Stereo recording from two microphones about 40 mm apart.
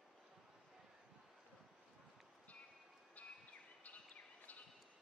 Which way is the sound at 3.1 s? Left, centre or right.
Left.